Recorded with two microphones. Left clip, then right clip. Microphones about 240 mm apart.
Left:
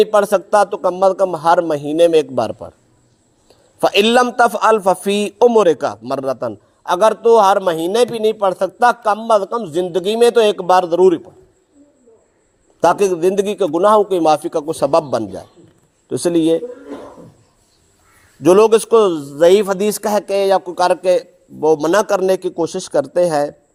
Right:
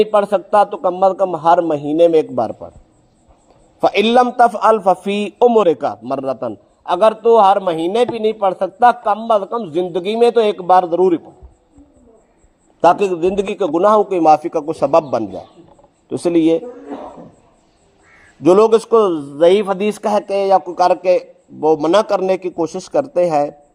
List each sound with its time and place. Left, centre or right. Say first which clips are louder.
0.0 s a man's voice: left 1 dB; left
3.8 s a man's voice: even; left
4.7 s a man's voice: even; left
13.0 s a man's voice: left 2 dB; left
13.6 s a man's voice: right 1 dB; left
16.0 s a man's voice: right 1 dB; left
18.4 s a man's voice: even; left
18.9 s a man's voice: left 1 dB; left
19.4 s a man's voice: left 1 dB; left
19.6 s a man's voice: left 1 dB; left
20.0 s a man's voice: even; left